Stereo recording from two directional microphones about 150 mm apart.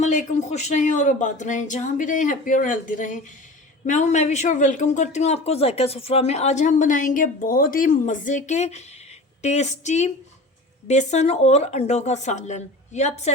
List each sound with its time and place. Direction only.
0.0 s speech: 55° left (ahead or behind)